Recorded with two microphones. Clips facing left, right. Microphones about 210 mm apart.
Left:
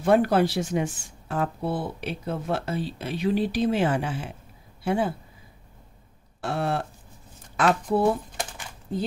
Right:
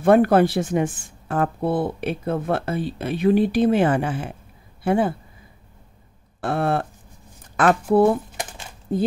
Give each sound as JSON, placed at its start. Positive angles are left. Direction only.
{"t": 0.0, "sound": "speech", "side_deg": -55}
{"t": 6.4, "sound": "speech", "side_deg": -55}